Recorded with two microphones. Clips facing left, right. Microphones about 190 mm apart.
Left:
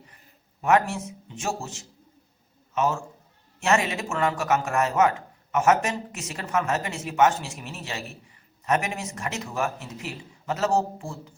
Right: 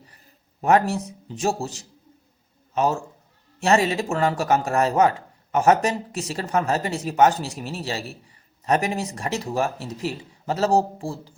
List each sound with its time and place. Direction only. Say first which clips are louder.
0.6 s a man's voice: right 3 dB; 35° right (ahead or behind)